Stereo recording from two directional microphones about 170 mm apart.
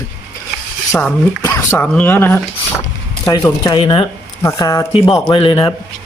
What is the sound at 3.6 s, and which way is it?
Speech, 25° left (ahead or behind).